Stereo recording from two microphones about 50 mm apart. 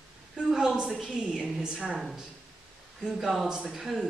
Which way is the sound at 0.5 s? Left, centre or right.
Centre.